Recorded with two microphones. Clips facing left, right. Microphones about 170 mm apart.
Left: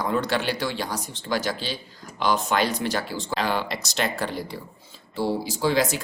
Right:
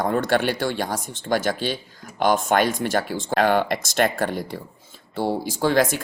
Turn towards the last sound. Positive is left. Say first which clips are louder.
# right 3 dB
turn(degrees=-50)  # may be behind; listen again after turning